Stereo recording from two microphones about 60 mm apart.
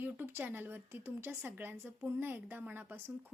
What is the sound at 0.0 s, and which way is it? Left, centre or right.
Speech, right.